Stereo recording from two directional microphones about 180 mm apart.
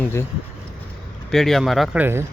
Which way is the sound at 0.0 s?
15° left (ahead or behind).